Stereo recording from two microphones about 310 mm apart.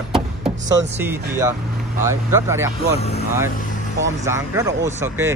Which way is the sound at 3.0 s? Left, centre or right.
Centre.